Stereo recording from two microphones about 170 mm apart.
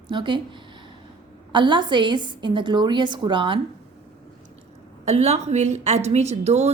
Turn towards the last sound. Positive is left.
turn(degrees=-40)  # may be behind; listen again after turning